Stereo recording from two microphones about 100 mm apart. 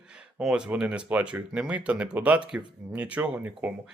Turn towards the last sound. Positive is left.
turn(degrees=-15)  # may be behind; listen again after turning